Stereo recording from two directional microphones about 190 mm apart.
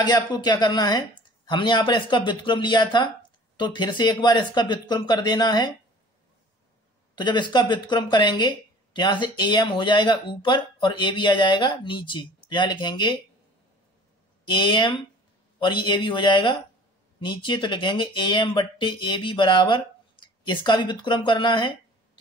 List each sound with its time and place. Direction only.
0.0 s speech: 20° left (ahead or behind)
7.2 s speech: 25° left (ahead or behind)
14.4 s speech: 25° left (ahead or behind)